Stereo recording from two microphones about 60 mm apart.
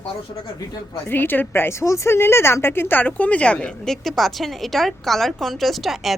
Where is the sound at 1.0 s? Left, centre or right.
Left.